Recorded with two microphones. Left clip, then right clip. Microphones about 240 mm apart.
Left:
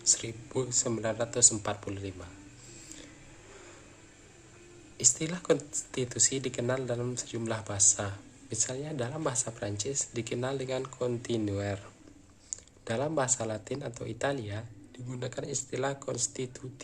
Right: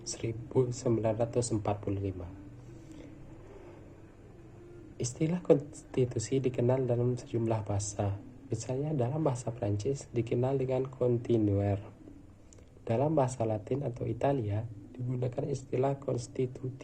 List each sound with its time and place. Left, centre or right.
0.0 s speech: centre
4.9 s speech: centre
12.5 s a sound: centre
13.1 s speech: centre